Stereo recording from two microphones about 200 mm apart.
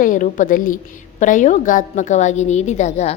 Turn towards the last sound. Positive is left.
turn(degrees=35)  # may be behind; listen again after turning